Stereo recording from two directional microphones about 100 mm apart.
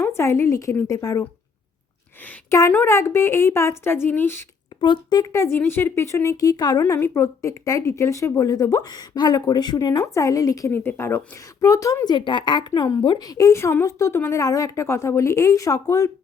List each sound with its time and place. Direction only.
0.0 s speech: 30° left (ahead or behind)
2.5 s speech: 25° left (ahead or behind)
4.8 s a woman's voice: 50° left (ahead or behind)
10.7 s a woman's voice: 20° left (ahead or behind)